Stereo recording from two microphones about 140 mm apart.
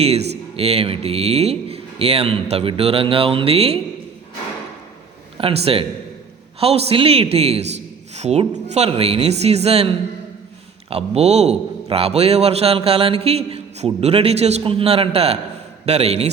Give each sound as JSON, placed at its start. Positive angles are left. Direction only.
{"t": 0.0, "sound": "a man's voice", "side_deg": -45}
{"t": 5.4, "sound": "a man's voice", "side_deg": -40}